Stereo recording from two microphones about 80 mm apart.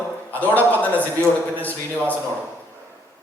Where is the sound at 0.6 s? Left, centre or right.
Left.